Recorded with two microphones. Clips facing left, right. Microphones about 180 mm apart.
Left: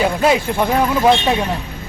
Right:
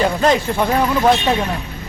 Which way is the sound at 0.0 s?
10° left (ahead or behind).